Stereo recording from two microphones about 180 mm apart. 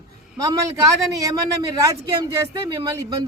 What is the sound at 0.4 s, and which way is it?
A man's voice, 20° right (ahead or behind).